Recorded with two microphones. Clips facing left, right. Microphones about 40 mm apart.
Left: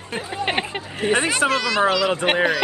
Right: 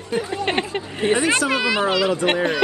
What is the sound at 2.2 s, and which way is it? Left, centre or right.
Speech, left.